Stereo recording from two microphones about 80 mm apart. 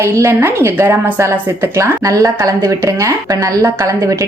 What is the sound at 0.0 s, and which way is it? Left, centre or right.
A woman's voice, right.